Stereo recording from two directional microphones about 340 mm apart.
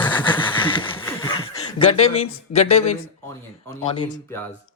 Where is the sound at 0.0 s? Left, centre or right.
Centre.